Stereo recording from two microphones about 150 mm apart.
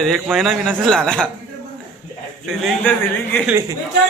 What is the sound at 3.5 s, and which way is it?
Speech, 20° right (ahead or behind).